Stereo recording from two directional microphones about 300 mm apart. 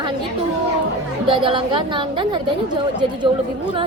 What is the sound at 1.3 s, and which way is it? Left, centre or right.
Speech, centre.